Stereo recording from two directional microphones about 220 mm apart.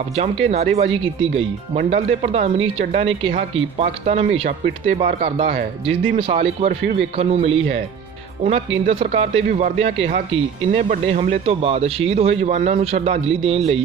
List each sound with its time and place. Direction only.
0.1 s speech: 30° right (ahead or behind)
6.8 s speech: 50° right (ahead or behind)
7.2 s speech: 30° right (ahead or behind)